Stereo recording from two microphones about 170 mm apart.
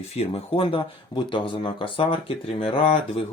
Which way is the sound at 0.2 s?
35° left (ahead or behind).